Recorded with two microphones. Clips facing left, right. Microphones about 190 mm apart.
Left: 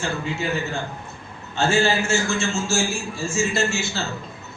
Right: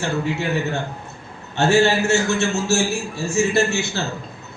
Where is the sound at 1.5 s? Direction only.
65° right (ahead or behind).